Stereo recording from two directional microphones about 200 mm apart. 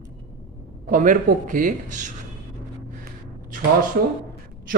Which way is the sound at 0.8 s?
40° right (ahead or behind).